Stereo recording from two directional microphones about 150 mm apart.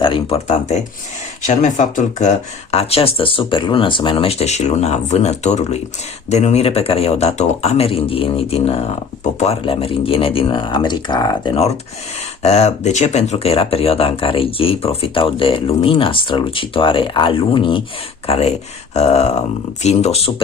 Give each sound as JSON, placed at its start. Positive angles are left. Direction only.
{"t": 0.0, "sound": "speech", "side_deg": 35}
{"t": 1.5, "sound": "speech", "side_deg": 55}
{"t": 2.7, "sound": "speech", "side_deg": 40}
{"t": 12.4, "sound": "speech", "side_deg": 45}